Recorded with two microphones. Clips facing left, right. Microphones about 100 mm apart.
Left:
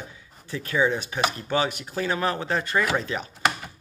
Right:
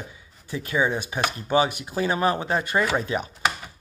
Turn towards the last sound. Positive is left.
turn(degrees=-10)  # may be behind; listen again after turning